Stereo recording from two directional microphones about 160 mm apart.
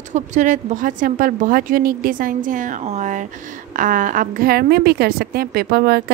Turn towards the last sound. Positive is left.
turn(degrees=-75)  # may be behind; listen again after turning